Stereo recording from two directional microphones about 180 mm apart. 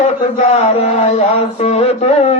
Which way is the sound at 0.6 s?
35° left (ahead or behind).